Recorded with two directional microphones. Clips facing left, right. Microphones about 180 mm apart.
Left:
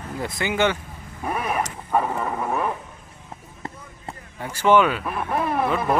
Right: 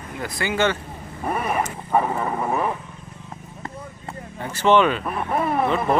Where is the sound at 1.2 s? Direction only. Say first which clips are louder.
Right 1 dB; centre (ahead or behind).